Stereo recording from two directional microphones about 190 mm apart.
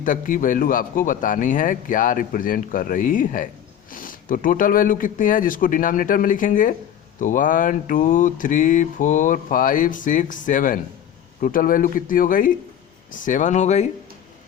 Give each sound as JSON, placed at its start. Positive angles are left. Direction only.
{"t": 0.0, "sound": "mantra", "side_deg": 45}
{"t": 13.1, "sound": "speech", "side_deg": 40}